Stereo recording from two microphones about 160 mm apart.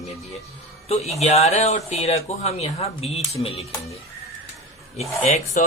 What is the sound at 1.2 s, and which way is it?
Speech, 40° left (ahead or behind).